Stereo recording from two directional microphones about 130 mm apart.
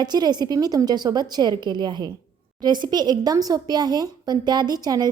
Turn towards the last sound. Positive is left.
turn(degrees=-30)  # may be behind; listen again after turning